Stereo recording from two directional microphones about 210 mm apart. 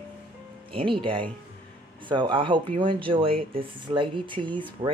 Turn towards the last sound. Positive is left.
turn(degrees=-25)  # may be behind; listen again after turning